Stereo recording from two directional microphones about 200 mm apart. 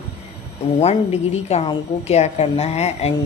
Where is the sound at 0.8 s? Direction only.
30° left (ahead or behind).